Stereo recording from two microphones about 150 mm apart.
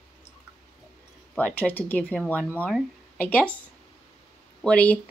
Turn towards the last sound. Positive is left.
turn(degrees=10)  # may be behind; listen again after turning